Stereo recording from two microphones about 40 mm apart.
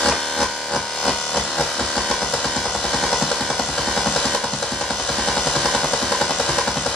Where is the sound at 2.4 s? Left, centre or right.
Centre.